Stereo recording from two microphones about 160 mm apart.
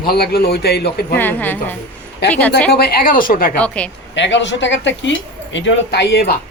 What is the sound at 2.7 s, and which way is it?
Speech, 70° left (ahead or behind).